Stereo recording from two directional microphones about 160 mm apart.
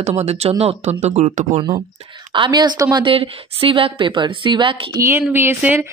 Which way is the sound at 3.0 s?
35° right (ahead or behind).